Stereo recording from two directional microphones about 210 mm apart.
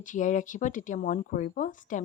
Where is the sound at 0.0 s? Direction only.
40° left (ahead or behind).